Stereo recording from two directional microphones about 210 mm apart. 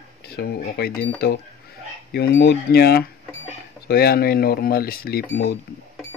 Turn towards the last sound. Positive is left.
turn(degrees=45)  # may be behind; listen again after turning